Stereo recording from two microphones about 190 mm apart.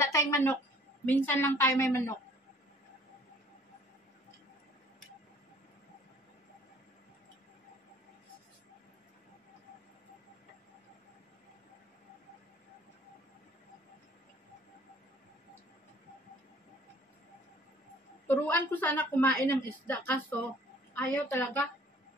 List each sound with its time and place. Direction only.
0.0 s a woman's voice: 15° left (ahead or behind)
18.2 s a woman's voice: 10° left (ahead or behind)